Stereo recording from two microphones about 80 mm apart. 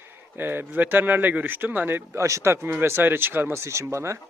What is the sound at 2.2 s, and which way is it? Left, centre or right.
Speech, right.